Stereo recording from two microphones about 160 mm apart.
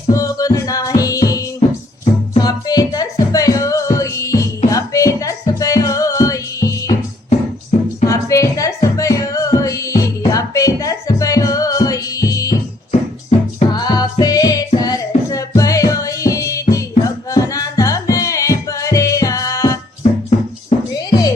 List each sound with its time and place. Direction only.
0.1 s music: 20° left (ahead or behind)
8.0 s music: 20° left (ahead or behind)
13.3 s music: 45° left (ahead or behind)
13.7 s music: 25° left (ahead or behind)
20.9 s music: 25° left (ahead or behind)